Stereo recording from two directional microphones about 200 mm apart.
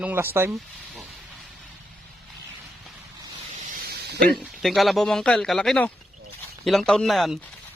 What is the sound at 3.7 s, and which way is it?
Snake, 50° right (ahead or behind).